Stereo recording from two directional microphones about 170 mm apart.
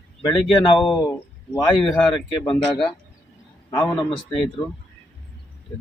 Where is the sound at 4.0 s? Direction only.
30° left (ahead or behind).